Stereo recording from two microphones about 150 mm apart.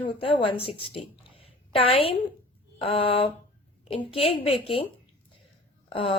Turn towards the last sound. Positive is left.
turn(degrees=35)  # may be behind; listen again after turning